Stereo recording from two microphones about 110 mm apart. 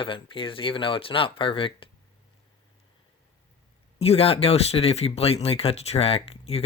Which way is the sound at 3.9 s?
65° left (ahead or behind).